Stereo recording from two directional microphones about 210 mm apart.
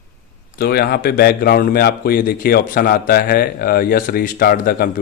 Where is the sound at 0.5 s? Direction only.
50° left (ahead or behind).